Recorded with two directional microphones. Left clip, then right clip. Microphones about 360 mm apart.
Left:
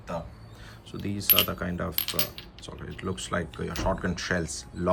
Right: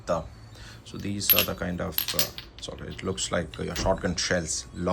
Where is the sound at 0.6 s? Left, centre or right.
Centre.